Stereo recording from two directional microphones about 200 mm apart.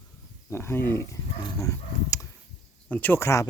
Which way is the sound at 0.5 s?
10° left (ahead or behind).